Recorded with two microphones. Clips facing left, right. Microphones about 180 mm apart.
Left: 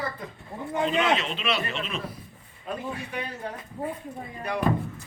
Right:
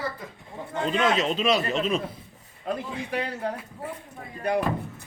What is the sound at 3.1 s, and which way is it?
Speech, 80° right.